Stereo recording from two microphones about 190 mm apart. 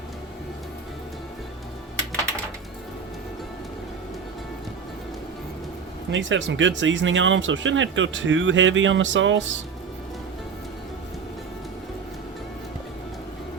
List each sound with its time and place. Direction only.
6.1 s speech: 75° right (ahead or behind)